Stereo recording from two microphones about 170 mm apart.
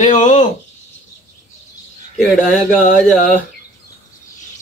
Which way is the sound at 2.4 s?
50° left (ahead or behind).